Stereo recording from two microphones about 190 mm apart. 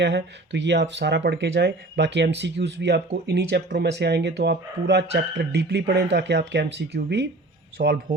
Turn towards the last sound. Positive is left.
turn(degrees=-60)  # may be behind; listen again after turning